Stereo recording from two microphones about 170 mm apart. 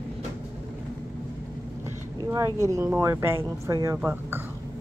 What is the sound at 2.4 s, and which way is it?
Speech, 15° left (ahead or behind).